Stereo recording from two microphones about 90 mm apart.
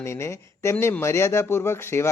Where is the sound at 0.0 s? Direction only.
30° left (ahead or behind).